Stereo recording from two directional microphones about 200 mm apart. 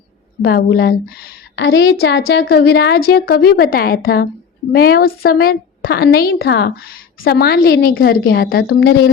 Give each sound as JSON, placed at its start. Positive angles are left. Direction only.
{"t": 0.4, "sound": "a woman's voice", "side_deg": 50}